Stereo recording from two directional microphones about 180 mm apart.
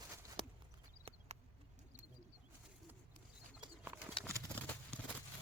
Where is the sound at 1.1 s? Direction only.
30° right (ahead or behind).